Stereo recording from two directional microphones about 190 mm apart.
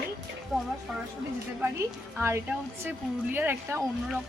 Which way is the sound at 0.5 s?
5° left (ahead or behind).